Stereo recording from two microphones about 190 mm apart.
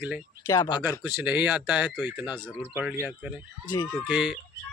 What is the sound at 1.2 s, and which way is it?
Speech, 5° right (ahead or behind).